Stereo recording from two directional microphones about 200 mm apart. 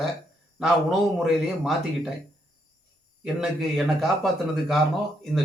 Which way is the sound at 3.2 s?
Centre (ahead or behind).